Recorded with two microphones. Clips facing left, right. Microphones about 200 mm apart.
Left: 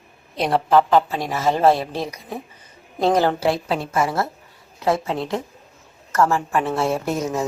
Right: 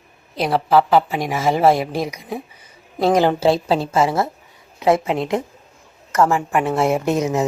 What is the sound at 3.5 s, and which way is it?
Speech, 30° right (ahead or behind).